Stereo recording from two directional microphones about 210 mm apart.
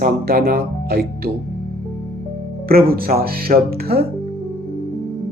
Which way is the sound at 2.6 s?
45° right (ahead or behind).